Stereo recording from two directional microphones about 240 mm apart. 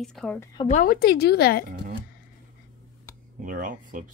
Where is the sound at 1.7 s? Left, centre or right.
Right.